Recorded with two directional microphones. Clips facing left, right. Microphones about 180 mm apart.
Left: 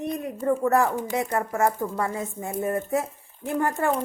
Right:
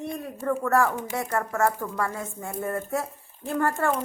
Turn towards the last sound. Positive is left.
turn(degrees=15)  # may be behind; listen again after turning